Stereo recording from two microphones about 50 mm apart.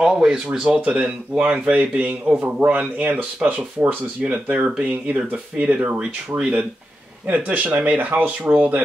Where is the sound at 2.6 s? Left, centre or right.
Right.